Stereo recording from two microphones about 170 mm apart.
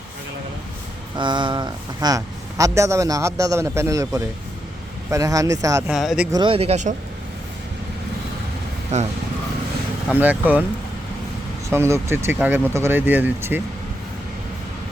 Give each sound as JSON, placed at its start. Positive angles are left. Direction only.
{"t": 1.1, "sound": "speech", "side_deg": -25}
{"t": 5.9, "sound": "speech", "side_deg": 0}
{"t": 6.3, "sound": "speech", "side_deg": -30}
{"t": 8.9, "sound": "speech", "side_deg": -40}
{"t": 10.1, "sound": "speech", "side_deg": -10}
{"t": 11.7, "sound": "speech", "side_deg": -15}